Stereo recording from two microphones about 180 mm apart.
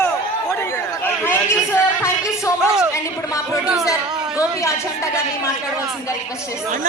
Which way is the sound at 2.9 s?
15° left (ahead or behind).